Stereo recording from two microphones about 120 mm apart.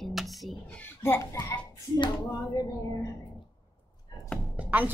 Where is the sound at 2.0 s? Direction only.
40° left (ahead or behind).